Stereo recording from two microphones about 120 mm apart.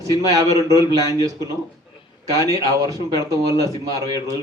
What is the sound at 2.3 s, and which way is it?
A man's voice, 30° right (ahead or behind).